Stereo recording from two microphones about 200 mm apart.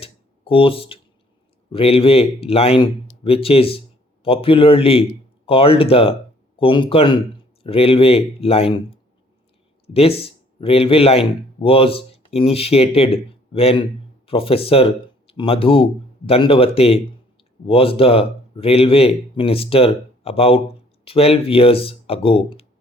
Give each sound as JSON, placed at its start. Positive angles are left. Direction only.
{"t": 0.0, "sound": "a sound", "side_deg": 25}
{"t": 1.7, "sound": "speech", "side_deg": 30}
{"t": 9.8, "sound": "speech", "side_deg": 30}